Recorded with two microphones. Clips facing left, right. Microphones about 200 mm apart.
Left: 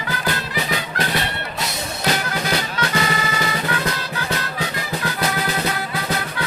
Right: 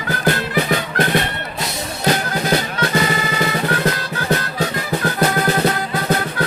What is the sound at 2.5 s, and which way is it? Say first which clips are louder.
Music: right 5 dB; 45° right (ahead or behind).